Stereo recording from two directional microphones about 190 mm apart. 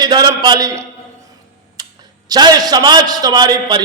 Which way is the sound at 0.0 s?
20° right (ahead or behind).